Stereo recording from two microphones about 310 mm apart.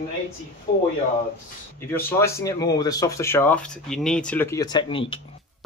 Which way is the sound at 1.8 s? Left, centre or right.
Centre.